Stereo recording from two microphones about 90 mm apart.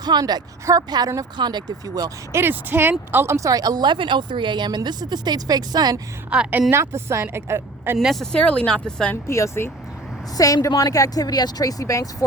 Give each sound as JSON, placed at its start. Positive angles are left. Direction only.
{"t": 0.0, "sound": "speech", "side_deg": -50}
{"t": 2.3, "sound": "a woman's voice", "side_deg": -25}
{"t": 6.3, "sound": "a woman's voice", "side_deg": -15}
{"t": 7.9, "sound": "speech", "side_deg": 0}
{"t": 9.2, "sound": "speech", "side_deg": 30}